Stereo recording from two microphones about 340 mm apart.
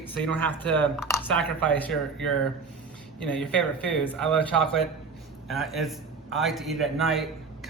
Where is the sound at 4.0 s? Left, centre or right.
Centre.